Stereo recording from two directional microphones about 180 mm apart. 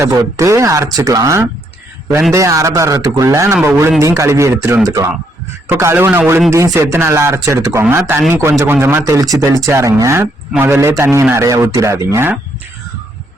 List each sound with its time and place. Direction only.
0.0 s a man's voice: 20° right (ahead or behind)